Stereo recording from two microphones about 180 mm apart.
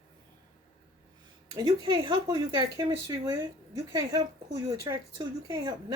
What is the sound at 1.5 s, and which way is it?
Speech, 25° right (ahead or behind).